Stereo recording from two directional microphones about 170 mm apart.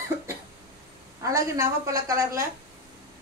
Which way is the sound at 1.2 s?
20° right (ahead or behind).